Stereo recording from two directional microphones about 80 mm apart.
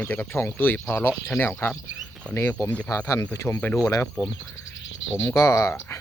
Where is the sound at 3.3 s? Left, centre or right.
Left.